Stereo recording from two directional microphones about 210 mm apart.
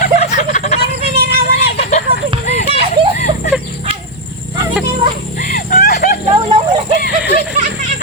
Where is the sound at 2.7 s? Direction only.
30° right (ahead or behind).